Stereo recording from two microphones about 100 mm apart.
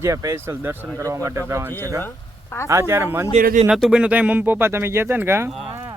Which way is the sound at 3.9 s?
10° right (ahead or behind).